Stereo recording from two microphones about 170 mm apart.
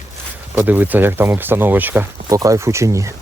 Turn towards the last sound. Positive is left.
turn(degrees=-15)  # may be behind; listen again after turning